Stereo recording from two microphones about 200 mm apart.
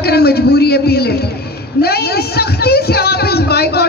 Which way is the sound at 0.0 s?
50° left (ahead or behind).